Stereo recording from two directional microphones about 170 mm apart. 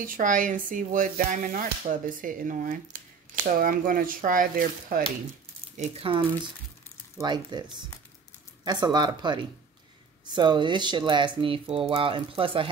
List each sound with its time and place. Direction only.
0.0 s speech: 50° right (ahead or behind)
5.8 s speech: 35° right (ahead or behind)
8.6 s speech: 25° right (ahead or behind)